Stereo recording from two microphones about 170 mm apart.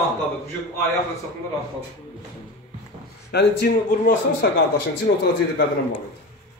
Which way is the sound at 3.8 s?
55° left (ahead or behind).